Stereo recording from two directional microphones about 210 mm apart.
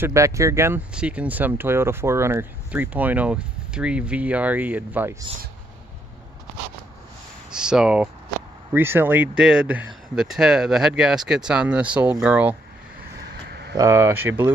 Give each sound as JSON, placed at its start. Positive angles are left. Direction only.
{"t": 0.0, "sound": "speech", "side_deg": -15}
{"t": 7.5, "sound": "speech", "side_deg": -5}
{"t": 13.5, "sound": "a sound", "side_deg": -50}
{"t": 13.7, "sound": "speech", "side_deg": -15}